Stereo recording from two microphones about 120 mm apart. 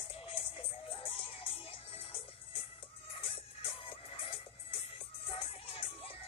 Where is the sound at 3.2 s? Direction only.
50° left (ahead or behind).